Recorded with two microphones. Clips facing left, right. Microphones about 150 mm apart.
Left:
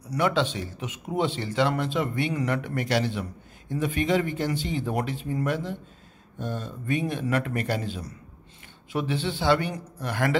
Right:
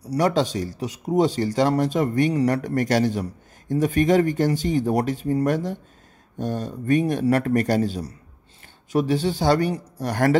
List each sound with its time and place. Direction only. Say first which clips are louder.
0.0 s a man's voice: right 4 dB; 35° right (ahead or behind)